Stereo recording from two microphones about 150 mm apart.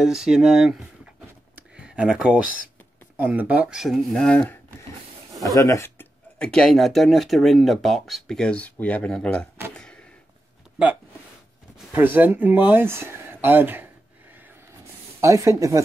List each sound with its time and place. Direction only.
0.0 s speech: 5° right (ahead or behind)
1.5 s clicking: 5° right (ahead or behind)
3.2 s speech: 10° right (ahead or behind); by 4.6 s 10° left (ahead or behind)
5.6 s speech: 20° left (ahead or behind)
6.3 s speech: 5° left (ahead or behind)
11.9 s speech: 10° right (ahead or behind)
15.1 s speech: 20° right (ahead or behind)